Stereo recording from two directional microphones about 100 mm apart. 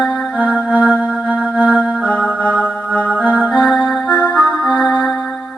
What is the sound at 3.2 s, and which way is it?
Music, 15° left (ahead or behind).